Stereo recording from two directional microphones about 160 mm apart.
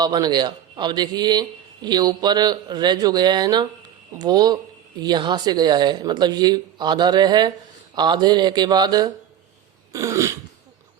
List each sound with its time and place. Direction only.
0.0 s a man's voice: 25° right (ahead or behind)